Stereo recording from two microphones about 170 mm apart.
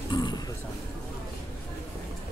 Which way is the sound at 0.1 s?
25° left (ahead or behind).